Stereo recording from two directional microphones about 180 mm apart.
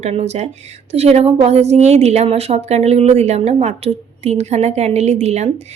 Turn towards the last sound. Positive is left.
turn(degrees=-40)  # may be behind; listen again after turning